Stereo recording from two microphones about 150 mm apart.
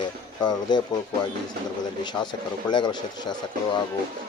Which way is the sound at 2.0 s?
30° left (ahead or behind).